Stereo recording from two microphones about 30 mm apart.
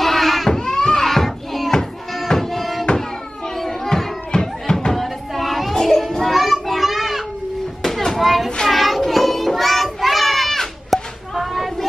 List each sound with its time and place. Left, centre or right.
0.0 s a sound: centre
0.5 s a sound: left
1.0 s children playing: centre
2.1 s music: centre
3.5 s children playing: centre
4.3 s music: left
4.9 s a sound: centre
5.8 s children playing: centre
6.3 s child singing: centre
6.9 s children playing: centre
7.8 s children playing: centre
8.6 s child singing: centre
9.6 s children playing: centre
11.3 s a sound: centre